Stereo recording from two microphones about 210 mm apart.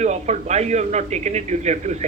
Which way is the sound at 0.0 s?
35° right (ahead or behind).